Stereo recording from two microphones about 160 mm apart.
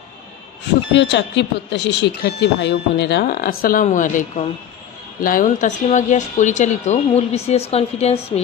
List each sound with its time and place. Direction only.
0.9 s speech: 90° left; by 3.8 s 65° left (ahead or behind)
3.8 s speech: 55° left (ahead or behind)